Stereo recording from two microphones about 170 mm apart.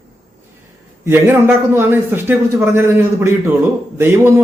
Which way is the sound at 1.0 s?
15° right (ahead or behind).